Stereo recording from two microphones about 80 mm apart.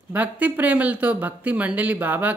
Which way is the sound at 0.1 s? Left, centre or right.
Centre.